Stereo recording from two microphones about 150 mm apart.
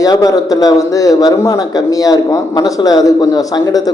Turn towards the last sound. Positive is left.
turn(degrees=25)  # may be behind; listen again after turning